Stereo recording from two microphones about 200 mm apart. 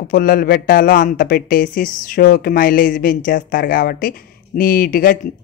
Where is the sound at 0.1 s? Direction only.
45° left (ahead or behind).